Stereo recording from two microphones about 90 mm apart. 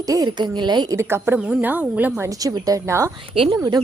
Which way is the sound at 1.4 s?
15° right (ahead or behind).